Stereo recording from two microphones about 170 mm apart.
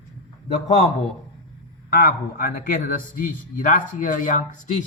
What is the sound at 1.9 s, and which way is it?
Speech, 60° left (ahead or behind).